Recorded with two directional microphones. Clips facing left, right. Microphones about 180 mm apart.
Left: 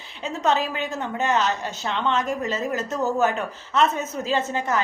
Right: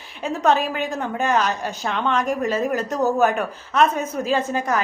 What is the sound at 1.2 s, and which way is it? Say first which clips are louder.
Speech: right 1 dB; 20° left (ahead or behind).